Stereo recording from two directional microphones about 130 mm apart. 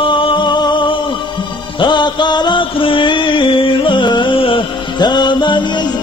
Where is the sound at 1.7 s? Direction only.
35° left (ahead or behind).